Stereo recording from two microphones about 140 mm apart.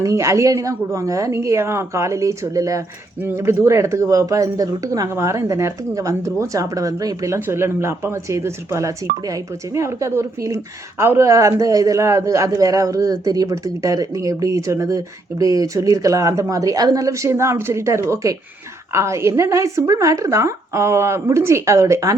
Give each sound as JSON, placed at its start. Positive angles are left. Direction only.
{"t": 0.0, "sound": "a woman's voice", "side_deg": -20}